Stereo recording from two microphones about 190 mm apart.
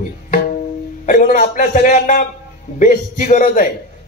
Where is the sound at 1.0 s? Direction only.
45° left (ahead or behind).